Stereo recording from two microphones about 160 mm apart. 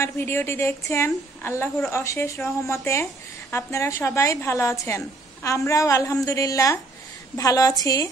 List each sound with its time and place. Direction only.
0.0 s a woman's voice: 15° left (ahead or behind)